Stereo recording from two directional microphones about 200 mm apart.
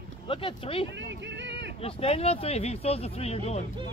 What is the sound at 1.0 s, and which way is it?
Music, 60° right (ahead or behind).